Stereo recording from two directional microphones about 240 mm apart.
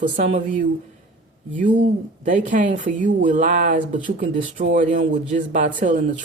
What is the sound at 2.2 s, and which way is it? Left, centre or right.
Speech, right.